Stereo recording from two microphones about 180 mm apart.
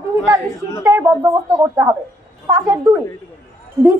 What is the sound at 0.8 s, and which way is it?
A woman's voice, 15° right (ahead or behind).